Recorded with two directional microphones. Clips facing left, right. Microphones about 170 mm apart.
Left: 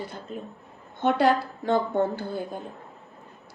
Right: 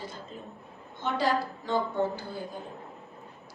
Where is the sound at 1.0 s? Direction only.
60° left (ahead or behind).